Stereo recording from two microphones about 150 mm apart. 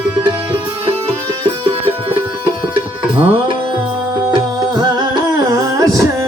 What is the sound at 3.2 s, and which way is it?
Music, 35° right (ahead or behind).